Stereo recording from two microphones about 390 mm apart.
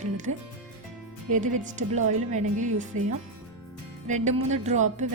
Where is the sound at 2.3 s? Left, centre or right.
Centre.